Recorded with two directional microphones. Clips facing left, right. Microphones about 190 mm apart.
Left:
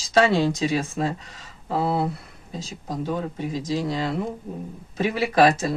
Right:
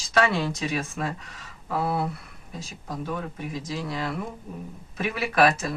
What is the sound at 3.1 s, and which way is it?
Speech, 30° left (ahead or behind).